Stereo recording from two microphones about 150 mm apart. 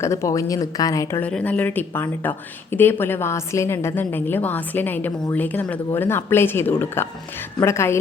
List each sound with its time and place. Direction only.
0.0 s speech: 20° left (ahead or behind)
1.2 s a woman's voice: 10° left (ahead or behind)